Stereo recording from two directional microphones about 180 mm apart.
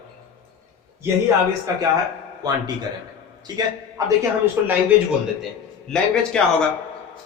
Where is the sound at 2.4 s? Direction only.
20° right (ahead or behind).